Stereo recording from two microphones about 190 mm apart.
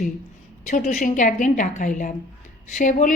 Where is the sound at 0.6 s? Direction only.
40° left (ahead or behind).